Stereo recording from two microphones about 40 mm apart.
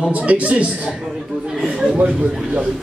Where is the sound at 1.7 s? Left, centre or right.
Right.